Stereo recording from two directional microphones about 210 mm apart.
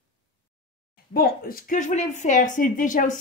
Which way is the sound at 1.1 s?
45° left (ahead or behind).